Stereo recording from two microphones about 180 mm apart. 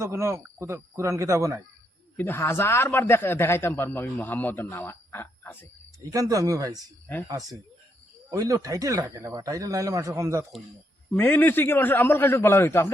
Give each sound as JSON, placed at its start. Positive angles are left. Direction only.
{"t": 0.0, "sound": "speech", "side_deg": -15}
{"t": 2.1, "sound": "a man's voice", "side_deg": 10}
{"t": 6.1, "sound": "speech", "side_deg": -20}
{"t": 11.1, "sound": "a man's voice", "side_deg": 10}